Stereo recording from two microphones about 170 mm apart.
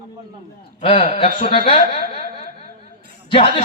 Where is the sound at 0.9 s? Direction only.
40° left (ahead or behind).